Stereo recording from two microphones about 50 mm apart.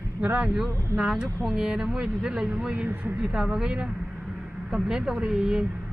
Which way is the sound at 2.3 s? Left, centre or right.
Right.